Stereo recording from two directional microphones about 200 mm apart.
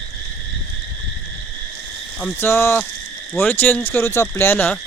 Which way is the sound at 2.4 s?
10° left (ahead or behind).